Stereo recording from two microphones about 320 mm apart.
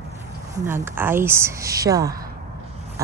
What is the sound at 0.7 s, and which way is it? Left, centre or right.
Speech, centre.